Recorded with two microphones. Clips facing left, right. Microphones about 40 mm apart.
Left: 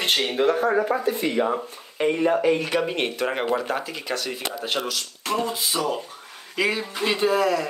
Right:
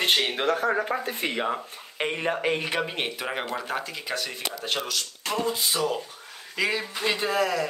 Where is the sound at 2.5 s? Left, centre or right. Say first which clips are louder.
Left 4 dB; centre.